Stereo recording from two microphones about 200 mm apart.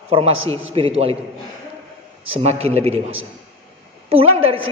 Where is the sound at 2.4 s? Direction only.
30° right (ahead or behind).